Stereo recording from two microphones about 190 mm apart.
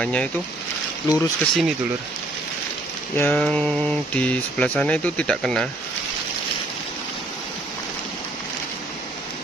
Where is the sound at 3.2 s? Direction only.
5° left (ahead or behind).